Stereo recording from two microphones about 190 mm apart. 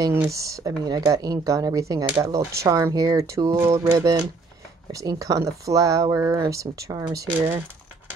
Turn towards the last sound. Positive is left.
turn(degrees=-15)  # may be behind; listen again after turning